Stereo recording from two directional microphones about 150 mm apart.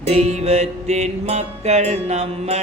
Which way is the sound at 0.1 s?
50° right (ahead or behind).